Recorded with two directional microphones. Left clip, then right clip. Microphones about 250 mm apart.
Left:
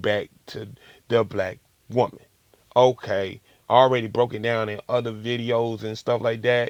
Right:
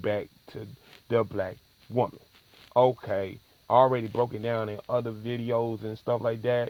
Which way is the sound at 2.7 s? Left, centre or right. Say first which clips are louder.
Left 5 dB; left.